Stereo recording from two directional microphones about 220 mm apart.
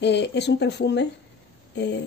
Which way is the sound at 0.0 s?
50° left (ahead or behind).